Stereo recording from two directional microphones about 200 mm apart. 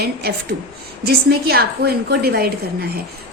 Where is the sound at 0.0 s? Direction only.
50° right (ahead or behind).